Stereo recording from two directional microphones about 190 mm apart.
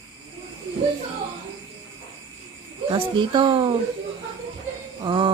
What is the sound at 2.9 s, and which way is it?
Speech, 25° right (ahead or behind).